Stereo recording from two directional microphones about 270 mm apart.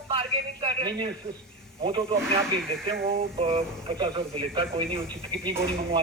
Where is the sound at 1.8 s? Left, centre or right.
Centre.